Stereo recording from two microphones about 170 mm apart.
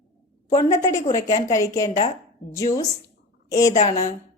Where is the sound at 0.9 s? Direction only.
20° left (ahead or behind).